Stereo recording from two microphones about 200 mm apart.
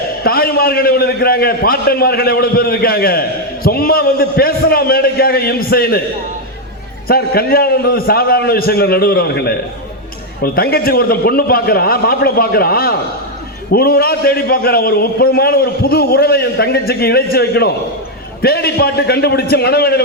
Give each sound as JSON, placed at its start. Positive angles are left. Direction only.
{"t": 0.2, "sound": "a man's voice", "side_deg": 50}
{"t": 7.1, "sound": "a man's voice", "side_deg": 50}